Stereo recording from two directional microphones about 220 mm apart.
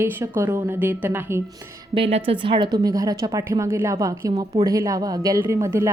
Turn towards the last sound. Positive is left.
turn(degrees=-15)  # may be behind; listen again after turning